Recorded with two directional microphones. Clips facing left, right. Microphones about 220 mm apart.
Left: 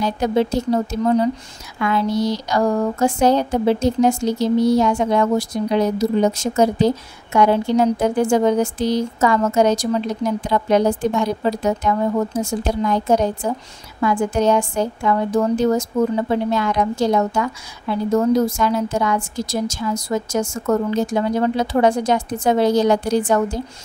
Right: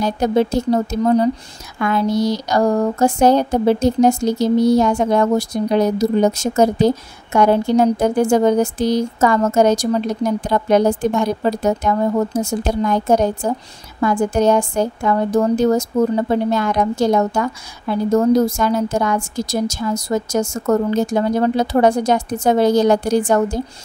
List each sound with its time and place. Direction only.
0.0 s a woman's voice: 45° right (ahead or behind)
1.0 s speech: 35° right (ahead or behind)
1.8 s a woman's voice: 45° right (ahead or behind)